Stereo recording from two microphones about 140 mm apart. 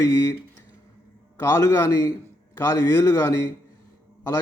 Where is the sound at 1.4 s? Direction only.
25° left (ahead or behind).